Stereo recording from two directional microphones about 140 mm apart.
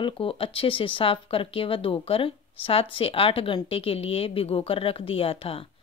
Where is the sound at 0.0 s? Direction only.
40° left (ahead or behind).